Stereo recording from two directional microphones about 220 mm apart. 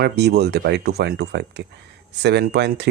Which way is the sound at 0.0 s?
50° right (ahead or behind).